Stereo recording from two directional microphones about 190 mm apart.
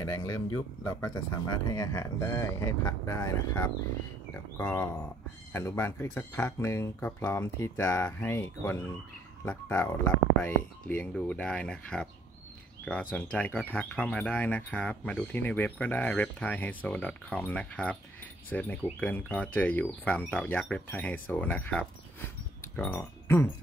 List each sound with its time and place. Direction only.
0.0 s speech: 15° left (ahead or behind)